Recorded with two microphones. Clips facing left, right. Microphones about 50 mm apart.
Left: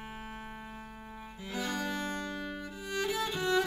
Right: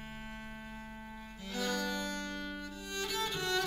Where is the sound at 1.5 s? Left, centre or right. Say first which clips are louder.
Left 1 dB; centre.